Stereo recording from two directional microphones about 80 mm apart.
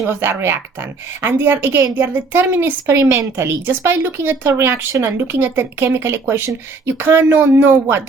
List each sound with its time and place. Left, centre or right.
0.1 s a woman's voice: right